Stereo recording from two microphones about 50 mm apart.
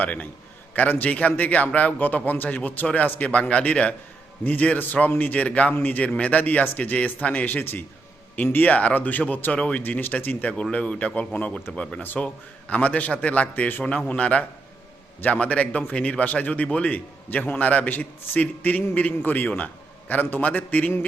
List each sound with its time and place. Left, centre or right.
0.0 s a man's voice: left
8.6 s a man's voice: left
11.9 s a man's voice: left
12.2 s a man's voice: left
13.8 s a man's voice: left